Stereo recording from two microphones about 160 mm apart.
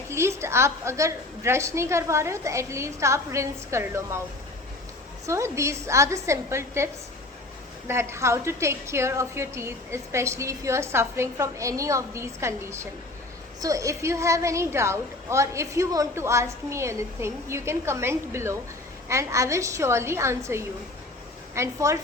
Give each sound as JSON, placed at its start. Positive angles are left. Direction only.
{"t": 0.1, "sound": "a woman's voice", "side_deg": -15}
{"t": 5.2, "sound": "a woman's voice", "side_deg": -20}